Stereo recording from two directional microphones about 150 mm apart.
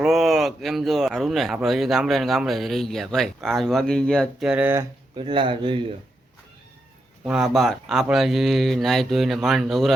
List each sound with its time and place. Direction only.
0.0 s speech: centre (ahead or behind)
4.4 s speech: 10° right (ahead or behind)
5.1 s speech: 35° right (ahead or behind)
7.3 s speech: 5° right (ahead or behind)